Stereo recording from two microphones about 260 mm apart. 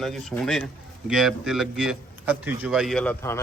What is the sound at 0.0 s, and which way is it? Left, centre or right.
Speech, centre.